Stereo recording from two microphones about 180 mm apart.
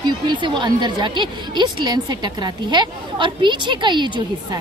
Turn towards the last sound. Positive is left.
turn(degrees=-25)  # may be behind; listen again after turning